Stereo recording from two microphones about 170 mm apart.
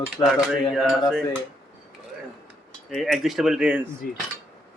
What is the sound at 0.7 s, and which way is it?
Speech, centre (ahead or behind).